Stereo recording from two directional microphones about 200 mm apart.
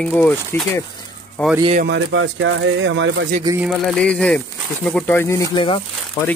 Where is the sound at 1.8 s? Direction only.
65° right (ahead or behind).